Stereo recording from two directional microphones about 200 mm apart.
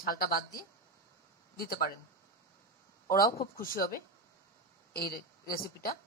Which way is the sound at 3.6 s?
45° left (ahead or behind).